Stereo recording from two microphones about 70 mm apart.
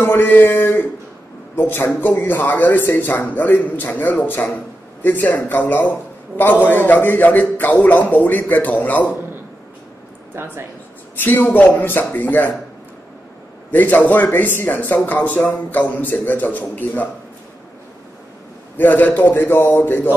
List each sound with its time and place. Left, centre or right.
0.0 s a man's voice: left
10.3 s speech: right
11.1 s speech: left
13.7 s speech: left
18.8 s a man's voice: left